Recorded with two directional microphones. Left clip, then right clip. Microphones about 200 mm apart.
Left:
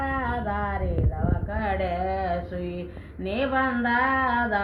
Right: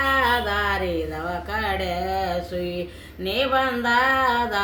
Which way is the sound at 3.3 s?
30° right (ahead or behind).